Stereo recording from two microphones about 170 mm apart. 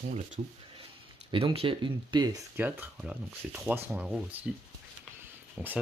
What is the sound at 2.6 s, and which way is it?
Speech, 10° right (ahead or behind).